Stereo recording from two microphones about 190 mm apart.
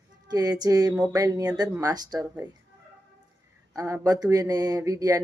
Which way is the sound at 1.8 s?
20° right (ahead or behind).